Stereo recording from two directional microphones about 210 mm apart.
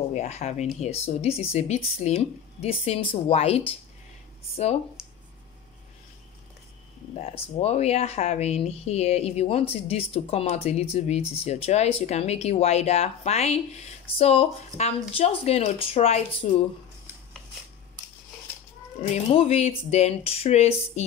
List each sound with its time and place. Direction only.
0.1 s speech: 30° left (ahead or behind)
5.0 s a sound: 5° right (ahead or behind)
7.5 s speech: 30° left (ahead or behind)
19.3 s speech: 30° left (ahead or behind)